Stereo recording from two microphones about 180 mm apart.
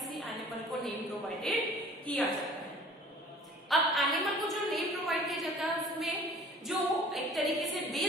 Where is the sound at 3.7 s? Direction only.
Centre (ahead or behind).